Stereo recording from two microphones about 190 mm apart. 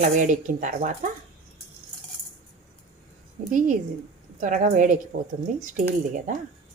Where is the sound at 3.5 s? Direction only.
45° right (ahead or behind).